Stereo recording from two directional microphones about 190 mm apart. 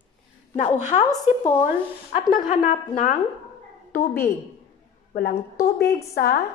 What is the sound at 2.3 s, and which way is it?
Speech, 45° left (ahead or behind).